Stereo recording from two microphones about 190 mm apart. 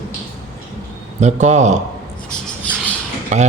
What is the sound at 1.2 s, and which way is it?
Speech, 35° right (ahead or behind).